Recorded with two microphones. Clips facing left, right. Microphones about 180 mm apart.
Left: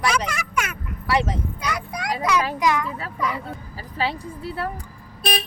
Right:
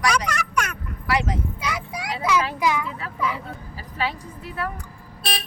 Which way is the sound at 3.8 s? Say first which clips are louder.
Left 2 dB; 35° left (ahead or behind).